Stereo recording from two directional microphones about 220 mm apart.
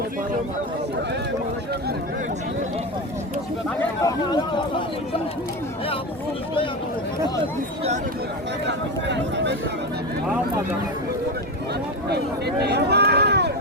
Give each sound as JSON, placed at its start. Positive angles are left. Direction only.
{"t": 3.8, "sound": "speech", "side_deg": 15}
{"t": 8.6, "sound": "speech", "side_deg": -50}
{"t": 12.0, "sound": "a sound", "side_deg": -50}